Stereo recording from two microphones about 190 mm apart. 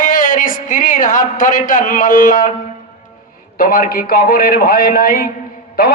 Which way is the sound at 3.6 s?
50° left (ahead or behind).